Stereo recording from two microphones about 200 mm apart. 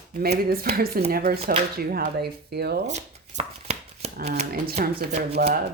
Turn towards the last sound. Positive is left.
turn(degrees=-50)  # may be behind; listen again after turning